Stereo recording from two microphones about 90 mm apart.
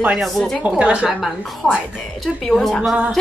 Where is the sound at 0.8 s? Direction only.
15° right (ahead or behind).